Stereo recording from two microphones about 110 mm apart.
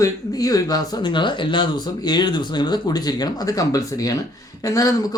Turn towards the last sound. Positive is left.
turn(degrees=30)  # may be behind; listen again after turning